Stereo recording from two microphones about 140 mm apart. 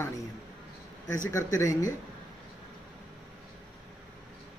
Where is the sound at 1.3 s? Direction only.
20° left (ahead or behind).